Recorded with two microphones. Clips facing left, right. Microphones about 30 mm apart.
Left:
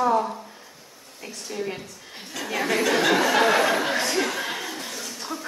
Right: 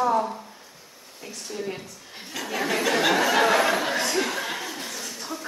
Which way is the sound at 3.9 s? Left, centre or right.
Centre.